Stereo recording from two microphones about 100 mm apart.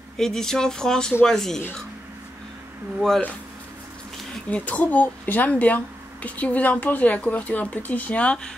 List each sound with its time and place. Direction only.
0.2 s speech: 5° left (ahead or behind)
4.5 s speech: 15° left (ahead or behind)